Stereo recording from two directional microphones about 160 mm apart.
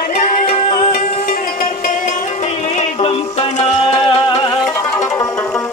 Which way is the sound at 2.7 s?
35° left (ahead or behind).